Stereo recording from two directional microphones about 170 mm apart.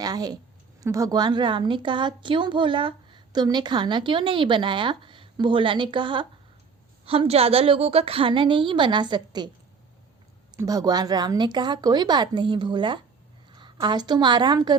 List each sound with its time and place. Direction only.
0.0 s a woman's voice: 20° right (ahead or behind)
10.6 s a woman's voice: 20° right (ahead or behind)